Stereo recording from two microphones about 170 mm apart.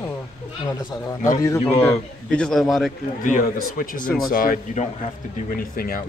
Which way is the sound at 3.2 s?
50° left (ahead or behind).